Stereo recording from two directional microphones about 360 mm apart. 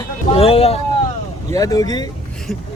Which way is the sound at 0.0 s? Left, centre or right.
Centre.